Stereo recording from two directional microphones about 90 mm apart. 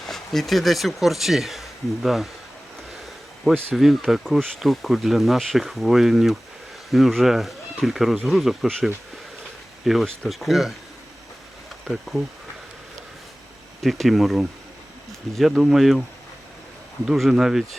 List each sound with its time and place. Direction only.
0.0 s speech: 5° left (ahead or behind)
3.8 s speech: centre (ahead or behind)
11.9 s speech: centre (ahead or behind)
13.8 s speech: centre (ahead or behind)
17.1 s speech: 5° right (ahead or behind)